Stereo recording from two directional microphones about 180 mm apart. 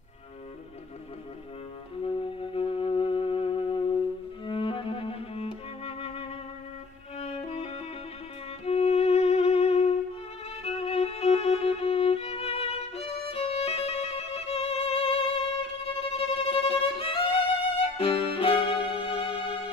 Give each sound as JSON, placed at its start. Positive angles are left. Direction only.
{"t": 2.0, "sound": "music", "side_deg": 30}
{"t": 7.2, "sound": "violin", "side_deg": 35}
{"t": 8.6, "sound": "music", "side_deg": 35}
{"t": 10.6, "sound": "violin", "side_deg": 35}
{"t": 16.0, "sound": "music", "side_deg": 30}